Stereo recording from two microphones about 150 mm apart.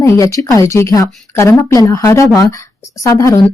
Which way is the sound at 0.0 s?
20° left (ahead or behind).